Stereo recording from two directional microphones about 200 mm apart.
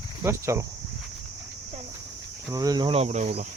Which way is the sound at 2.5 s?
20° right (ahead or behind).